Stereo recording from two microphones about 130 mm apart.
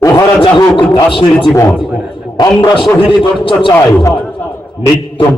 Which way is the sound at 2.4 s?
30° left (ahead or behind).